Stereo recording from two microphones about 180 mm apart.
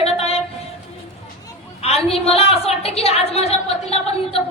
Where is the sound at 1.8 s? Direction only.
35° left (ahead or behind).